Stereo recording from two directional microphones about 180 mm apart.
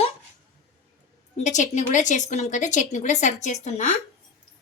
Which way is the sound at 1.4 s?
40° left (ahead or behind).